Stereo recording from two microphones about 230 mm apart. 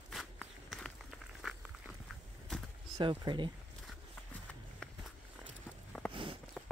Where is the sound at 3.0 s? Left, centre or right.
Right.